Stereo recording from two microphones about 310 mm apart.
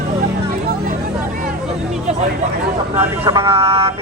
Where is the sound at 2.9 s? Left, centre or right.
Centre.